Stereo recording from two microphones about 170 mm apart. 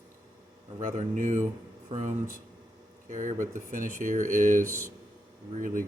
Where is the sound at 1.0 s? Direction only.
45° right (ahead or behind).